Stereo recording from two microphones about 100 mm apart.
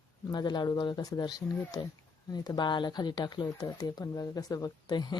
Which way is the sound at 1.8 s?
55° left (ahead or behind).